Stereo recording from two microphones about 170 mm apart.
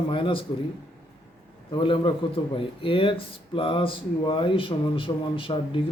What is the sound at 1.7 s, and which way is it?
Speech, 30° left (ahead or behind).